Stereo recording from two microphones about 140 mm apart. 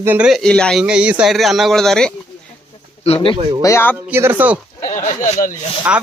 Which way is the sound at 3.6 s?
20° left (ahead or behind).